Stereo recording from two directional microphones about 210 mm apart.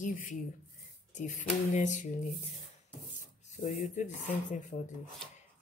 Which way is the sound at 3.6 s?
35° left (ahead or behind).